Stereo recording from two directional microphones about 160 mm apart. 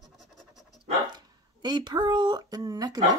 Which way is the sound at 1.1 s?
25° right (ahead or behind).